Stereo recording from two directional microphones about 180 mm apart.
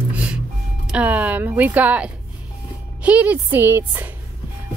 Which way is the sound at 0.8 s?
5° right (ahead or behind).